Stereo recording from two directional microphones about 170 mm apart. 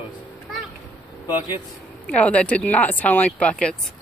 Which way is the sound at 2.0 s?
5° left (ahead or behind).